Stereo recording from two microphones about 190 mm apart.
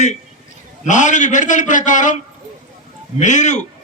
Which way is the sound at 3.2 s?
40° left (ahead or behind).